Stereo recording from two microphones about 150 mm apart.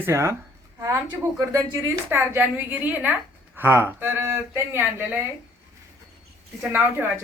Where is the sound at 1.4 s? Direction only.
20° right (ahead or behind).